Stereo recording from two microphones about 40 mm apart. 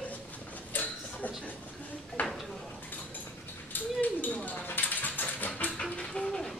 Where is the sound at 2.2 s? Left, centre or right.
Left.